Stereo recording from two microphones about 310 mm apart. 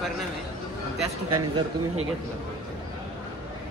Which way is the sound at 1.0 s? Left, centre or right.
Right.